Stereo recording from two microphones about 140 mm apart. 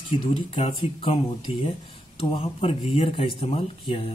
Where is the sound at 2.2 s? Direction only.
40° left (ahead or behind).